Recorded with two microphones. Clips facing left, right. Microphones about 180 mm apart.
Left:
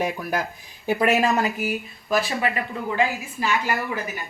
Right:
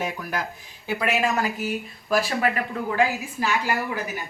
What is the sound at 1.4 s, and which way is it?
Speech, 25° left (ahead or behind).